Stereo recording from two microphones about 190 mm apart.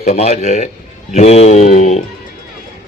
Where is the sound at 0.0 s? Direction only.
35° left (ahead or behind).